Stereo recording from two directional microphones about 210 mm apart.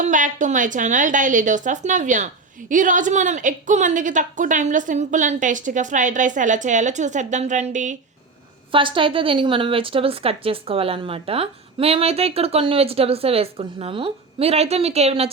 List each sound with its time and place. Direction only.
0.0 s a woman's voice: 35° right (ahead or behind)
8.7 s a woman's voice: 25° right (ahead or behind)